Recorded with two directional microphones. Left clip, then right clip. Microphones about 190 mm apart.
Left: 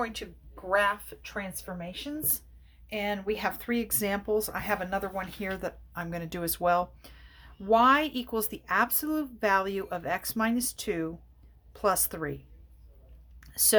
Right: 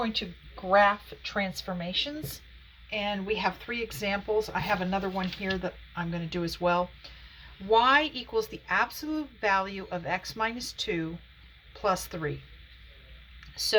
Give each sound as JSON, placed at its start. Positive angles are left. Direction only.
{"t": 0.7, "sound": "a woman's voice", "side_deg": 10}
{"t": 2.9, "sound": "speech", "side_deg": 60}
{"t": 13.4, "sound": "a sound", "side_deg": 55}